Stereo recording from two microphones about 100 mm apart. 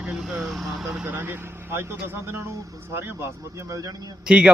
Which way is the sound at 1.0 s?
20° right (ahead or behind).